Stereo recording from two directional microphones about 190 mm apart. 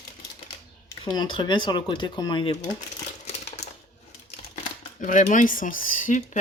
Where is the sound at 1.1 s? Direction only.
25° left (ahead or behind).